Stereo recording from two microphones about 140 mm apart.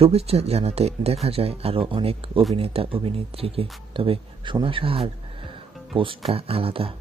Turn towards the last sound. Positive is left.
turn(degrees=-40)  # may be behind; listen again after turning